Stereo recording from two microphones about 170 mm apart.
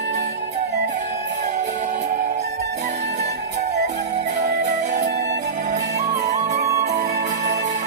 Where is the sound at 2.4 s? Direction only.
75° right (ahead or behind).